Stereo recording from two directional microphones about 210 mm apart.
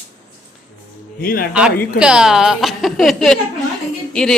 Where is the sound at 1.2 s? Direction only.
45° left (ahead or behind).